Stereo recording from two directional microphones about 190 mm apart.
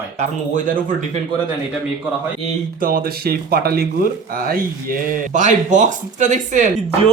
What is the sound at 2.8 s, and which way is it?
Speech, 50° right (ahead or behind).